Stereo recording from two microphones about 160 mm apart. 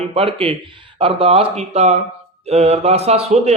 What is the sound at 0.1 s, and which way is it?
Speech, 35° right (ahead or behind).